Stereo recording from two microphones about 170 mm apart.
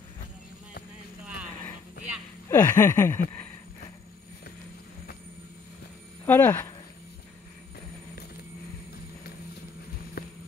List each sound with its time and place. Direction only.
2.5 s a sound: 15° left (ahead or behind)
6.2 s speech: 10° left (ahead or behind)
10.2 s vehicle: 70° left (ahead or behind)